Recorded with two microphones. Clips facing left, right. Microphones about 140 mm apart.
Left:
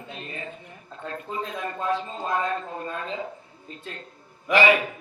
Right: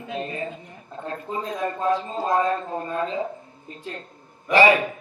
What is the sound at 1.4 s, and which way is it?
A man's voice, 35° right (ahead or behind).